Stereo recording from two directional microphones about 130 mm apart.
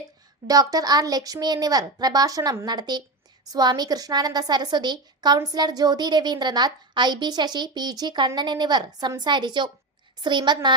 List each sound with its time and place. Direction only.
0.4 s a child's voice: 30° right (ahead or behind)